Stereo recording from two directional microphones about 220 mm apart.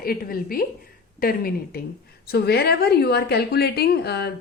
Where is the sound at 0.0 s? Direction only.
40° left (ahead or behind).